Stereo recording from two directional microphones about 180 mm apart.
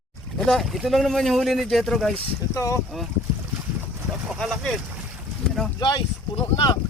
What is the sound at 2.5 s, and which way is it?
Speech, 20° left (ahead or behind).